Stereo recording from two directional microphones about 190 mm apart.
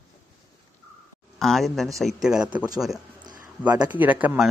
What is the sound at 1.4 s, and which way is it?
Speech, centre (ahead or behind).